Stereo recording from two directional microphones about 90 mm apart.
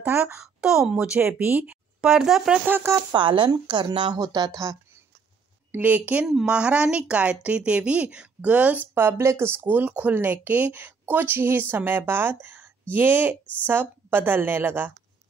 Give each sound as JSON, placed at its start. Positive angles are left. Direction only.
{"t": 0.0, "sound": "speech", "side_deg": -15}
{"t": 2.6, "sound": "speech", "side_deg": -30}
{"t": 3.2, "sound": "speech", "side_deg": -75}
{"t": 4.2, "sound": "speech", "side_deg": -45}
{"t": 5.7, "sound": "speech", "side_deg": -20}